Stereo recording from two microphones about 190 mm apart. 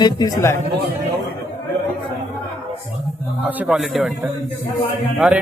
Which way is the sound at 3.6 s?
5° right (ahead or behind).